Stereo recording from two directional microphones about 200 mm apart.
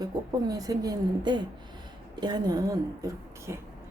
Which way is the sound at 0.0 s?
20° right (ahead or behind).